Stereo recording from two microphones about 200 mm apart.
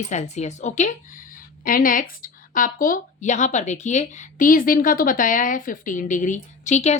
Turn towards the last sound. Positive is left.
turn(degrees=35)  # may be behind; listen again after turning